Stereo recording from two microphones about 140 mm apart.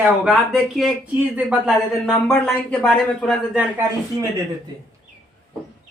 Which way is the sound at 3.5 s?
10° right (ahead or behind).